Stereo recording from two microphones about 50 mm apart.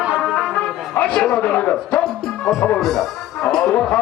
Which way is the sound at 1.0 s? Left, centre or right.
Left.